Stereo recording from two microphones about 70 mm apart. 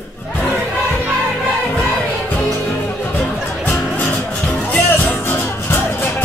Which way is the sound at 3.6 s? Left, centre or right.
Left.